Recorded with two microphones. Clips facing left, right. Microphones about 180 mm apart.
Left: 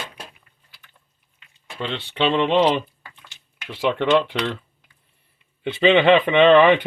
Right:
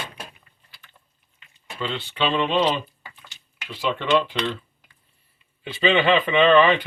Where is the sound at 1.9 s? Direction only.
65° left (ahead or behind).